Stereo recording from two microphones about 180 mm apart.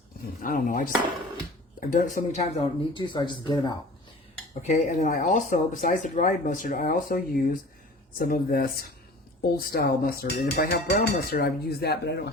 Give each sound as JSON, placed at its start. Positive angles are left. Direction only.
{"t": 0.4, "sound": "speech", "side_deg": 50}
{"t": 1.9, "sound": "speech", "side_deg": 45}
{"t": 2.6, "sound": "speech", "side_deg": 25}
{"t": 4.6, "sound": "speech", "side_deg": 40}